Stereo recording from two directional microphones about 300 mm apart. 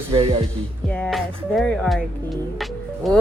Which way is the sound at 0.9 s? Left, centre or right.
Centre.